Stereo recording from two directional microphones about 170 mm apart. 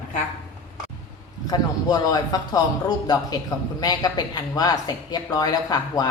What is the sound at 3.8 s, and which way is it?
A man's voice, 25° left (ahead or behind).